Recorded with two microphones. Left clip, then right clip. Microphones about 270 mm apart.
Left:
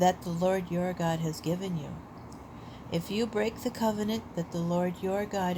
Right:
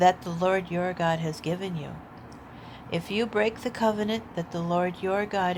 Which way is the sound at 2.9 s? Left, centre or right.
Right.